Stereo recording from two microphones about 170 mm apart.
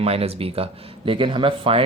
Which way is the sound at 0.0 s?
35° right (ahead or behind).